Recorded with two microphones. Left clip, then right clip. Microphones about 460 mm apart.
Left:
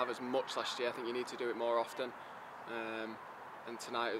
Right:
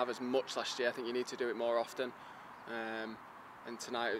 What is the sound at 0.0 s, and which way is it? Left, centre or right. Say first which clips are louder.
Speech: right 1 dB; right.